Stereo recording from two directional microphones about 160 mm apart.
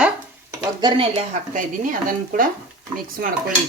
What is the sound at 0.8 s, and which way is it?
Speech, 30° right (ahead or behind).